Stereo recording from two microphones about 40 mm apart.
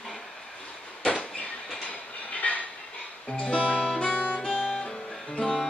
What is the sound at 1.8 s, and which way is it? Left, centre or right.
Train, left.